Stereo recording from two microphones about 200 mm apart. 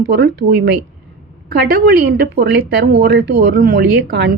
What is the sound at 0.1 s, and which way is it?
Speech, 55° right (ahead or behind).